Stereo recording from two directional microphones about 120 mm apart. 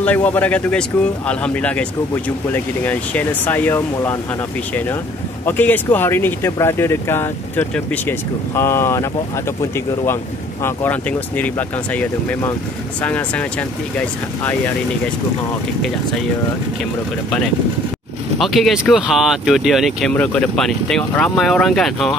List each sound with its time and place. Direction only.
0.0 s speech: 10° left (ahead or behind)
5.4 s speech: 15° left (ahead or behind)
10.6 s speech: 15° left (ahead or behind)
18.4 s speech: centre (ahead or behind)